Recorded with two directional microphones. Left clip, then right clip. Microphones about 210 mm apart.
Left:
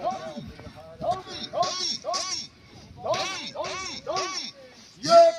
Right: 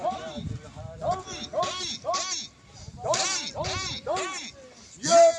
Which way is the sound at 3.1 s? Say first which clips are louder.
Right 2 dB; 15° left (ahead or behind).